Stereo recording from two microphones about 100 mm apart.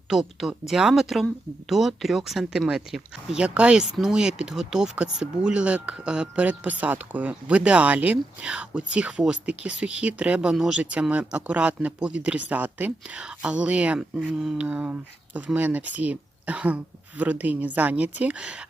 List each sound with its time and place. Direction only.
0.1 s speech: centre (ahead or behind)